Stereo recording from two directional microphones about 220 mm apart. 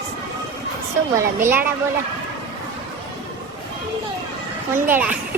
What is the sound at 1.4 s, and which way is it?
Speech, 10° right (ahead or behind).